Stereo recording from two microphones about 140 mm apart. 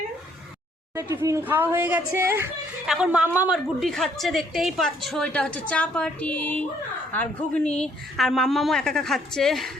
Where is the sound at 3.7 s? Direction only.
Centre (ahead or behind).